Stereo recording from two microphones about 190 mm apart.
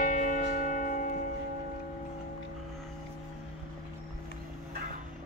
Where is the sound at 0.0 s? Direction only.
45° left (ahead or behind).